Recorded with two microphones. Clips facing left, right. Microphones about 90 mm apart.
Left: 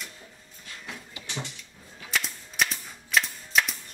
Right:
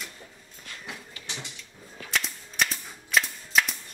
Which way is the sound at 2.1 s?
Centre (ahead or behind).